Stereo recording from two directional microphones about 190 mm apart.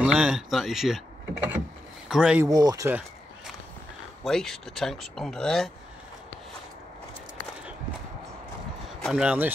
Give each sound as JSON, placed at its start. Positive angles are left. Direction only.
{"t": 0.0, "sound": "speech", "side_deg": -5}
{"t": 2.4, "sound": "speech", "side_deg": -20}
{"t": 4.2, "sound": "speech", "side_deg": 0}
{"t": 9.0, "sound": "speech", "side_deg": -5}